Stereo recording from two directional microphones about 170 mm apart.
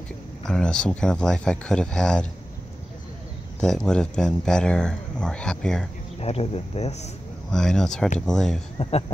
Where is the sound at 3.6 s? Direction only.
5° left (ahead or behind).